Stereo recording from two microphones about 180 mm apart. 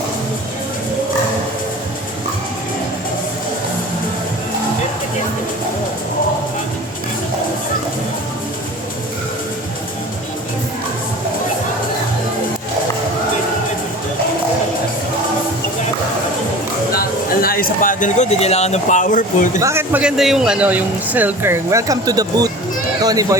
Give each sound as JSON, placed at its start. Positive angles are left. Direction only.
{"t": 17.4, "sound": "speech", "side_deg": 55}
{"t": 19.5, "sound": "speech", "side_deg": -15}